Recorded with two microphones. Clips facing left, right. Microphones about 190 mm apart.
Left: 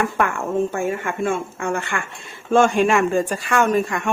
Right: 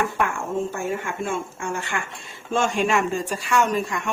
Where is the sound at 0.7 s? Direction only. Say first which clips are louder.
Left 4 dB; 55° left (ahead or behind).